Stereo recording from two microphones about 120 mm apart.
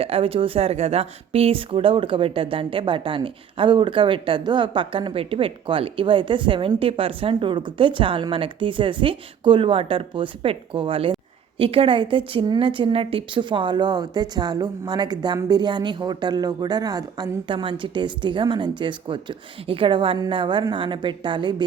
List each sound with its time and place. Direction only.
0.0 s speech: 50° right (ahead or behind)